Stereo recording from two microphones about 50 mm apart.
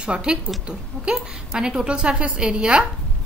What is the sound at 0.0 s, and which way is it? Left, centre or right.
A woman's voice, centre.